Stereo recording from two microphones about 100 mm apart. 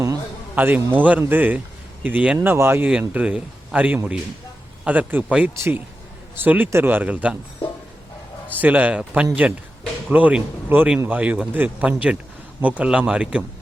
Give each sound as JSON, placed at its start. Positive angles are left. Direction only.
{"t": 0.5, "sound": "a man's voice", "side_deg": -20}
{"t": 8.4, "sound": "a man's voice", "side_deg": -20}